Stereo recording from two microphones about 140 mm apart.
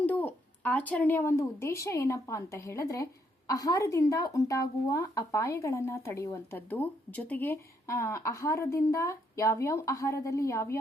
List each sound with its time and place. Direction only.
0.0 s speech: 10° left (ahead or behind)